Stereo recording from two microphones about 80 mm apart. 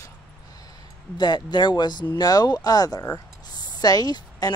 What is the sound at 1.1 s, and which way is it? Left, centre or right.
Speech, left.